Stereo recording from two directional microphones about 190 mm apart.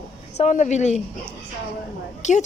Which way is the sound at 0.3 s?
35° left (ahead or behind).